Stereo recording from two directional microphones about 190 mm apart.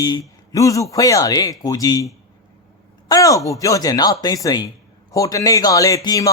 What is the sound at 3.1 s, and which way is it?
A man's voice, 15° left (ahead or behind).